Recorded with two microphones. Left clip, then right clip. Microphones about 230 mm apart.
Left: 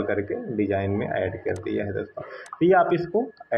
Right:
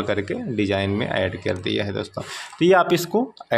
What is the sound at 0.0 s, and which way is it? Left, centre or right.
Speech, right.